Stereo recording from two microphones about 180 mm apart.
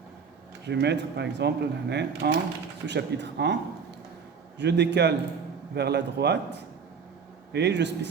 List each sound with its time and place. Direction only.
0.7 s speech: 70° right (ahead or behind)